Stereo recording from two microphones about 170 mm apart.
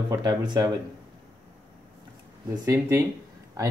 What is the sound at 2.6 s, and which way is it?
Speech, 15° right (ahead or behind).